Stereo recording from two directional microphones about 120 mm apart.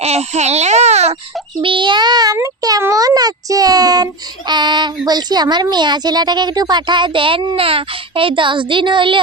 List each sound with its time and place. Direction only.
0.0 s baby cry: 65° right (ahead or behind)
1.6 s child singing: 45° right (ahead or behind)